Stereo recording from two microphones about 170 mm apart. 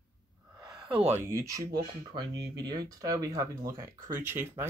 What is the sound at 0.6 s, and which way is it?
Speech, 5° right (ahead or behind).